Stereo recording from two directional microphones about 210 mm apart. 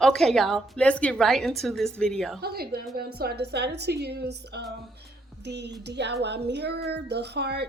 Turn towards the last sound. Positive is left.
turn(degrees=-50)  # may be behind; listen again after turning